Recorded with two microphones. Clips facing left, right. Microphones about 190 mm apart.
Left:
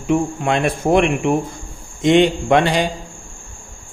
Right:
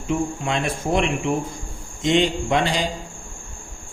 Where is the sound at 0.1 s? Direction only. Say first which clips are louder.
Left 6 dB; 60° left (ahead or behind).